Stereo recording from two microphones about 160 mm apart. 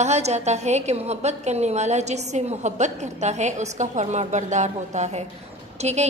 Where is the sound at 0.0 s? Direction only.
45° right (ahead or behind).